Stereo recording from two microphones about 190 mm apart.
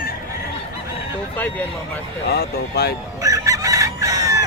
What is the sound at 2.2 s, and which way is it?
Speech, 60° left (ahead or behind).